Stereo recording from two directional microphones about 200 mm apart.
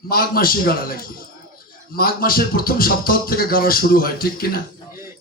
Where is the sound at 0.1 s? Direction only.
50° left (ahead or behind).